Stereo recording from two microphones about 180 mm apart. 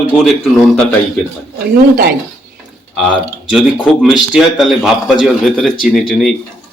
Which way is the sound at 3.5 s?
5° right (ahead or behind).